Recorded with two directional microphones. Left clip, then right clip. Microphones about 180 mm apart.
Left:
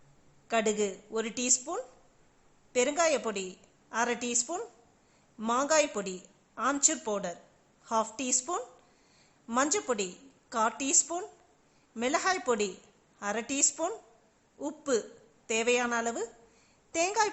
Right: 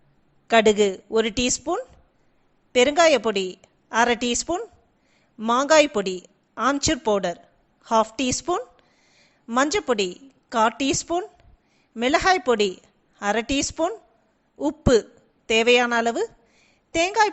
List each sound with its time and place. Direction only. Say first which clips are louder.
0.4 s a woman's voice: right 12 dB; 35° right (ahead or behind)